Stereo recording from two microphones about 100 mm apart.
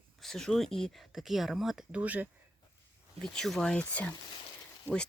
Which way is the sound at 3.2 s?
5° left (ahead or behind).